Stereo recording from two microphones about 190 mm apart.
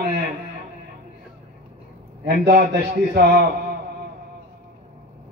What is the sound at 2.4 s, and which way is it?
Speech, 50° right (ahead or behind).